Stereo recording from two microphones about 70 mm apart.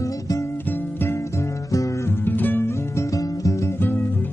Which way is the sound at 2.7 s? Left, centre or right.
Left.